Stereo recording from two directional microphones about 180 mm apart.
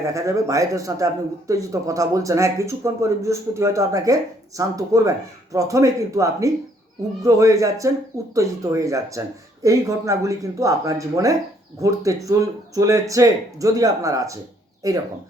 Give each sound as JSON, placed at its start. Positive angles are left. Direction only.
{"t": 0.0, "sound": "speech", "side_deg": -15}